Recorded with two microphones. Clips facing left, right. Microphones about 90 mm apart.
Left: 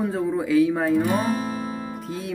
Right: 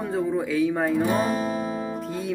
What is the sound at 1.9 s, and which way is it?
Music, centre (ahead or behind).